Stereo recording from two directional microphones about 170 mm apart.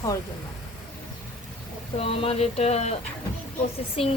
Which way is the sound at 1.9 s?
35° left (ahead or behind).